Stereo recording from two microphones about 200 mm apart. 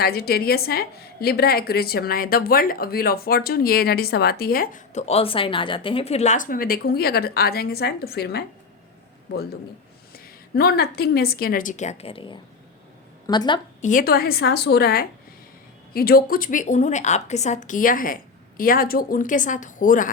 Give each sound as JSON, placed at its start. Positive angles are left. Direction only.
{"t": 0.0, "sound": "a woman's voice", "side_deg": 50}
{"t": 13.8, "sound": "a woman's voice", "side_deg": 45}